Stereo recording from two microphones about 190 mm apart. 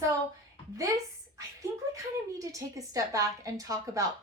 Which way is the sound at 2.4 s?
15° right (ahead or behind).